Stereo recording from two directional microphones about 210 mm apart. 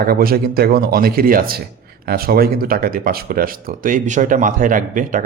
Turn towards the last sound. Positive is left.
turn(degrees=-40)  # may be behind; listen again after turning